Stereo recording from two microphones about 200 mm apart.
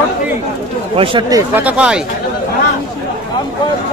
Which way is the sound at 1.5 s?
5° right (ahead or behind).